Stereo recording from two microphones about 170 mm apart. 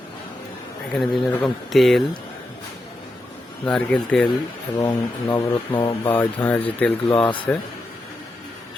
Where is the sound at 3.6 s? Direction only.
5° left (ahead or behind).